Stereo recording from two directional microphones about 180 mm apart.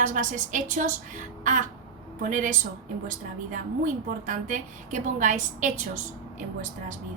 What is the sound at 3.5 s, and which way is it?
A woman's voice, 45° right (ahead or behind).